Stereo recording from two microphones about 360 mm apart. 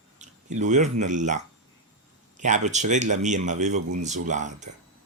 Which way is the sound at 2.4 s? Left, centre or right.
Centre.